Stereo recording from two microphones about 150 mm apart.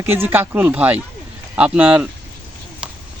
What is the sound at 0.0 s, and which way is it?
A man's voice, 15° right (ahead or behind).